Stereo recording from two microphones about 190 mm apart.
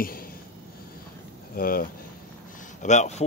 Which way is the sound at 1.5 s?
50° left (ahead or behind).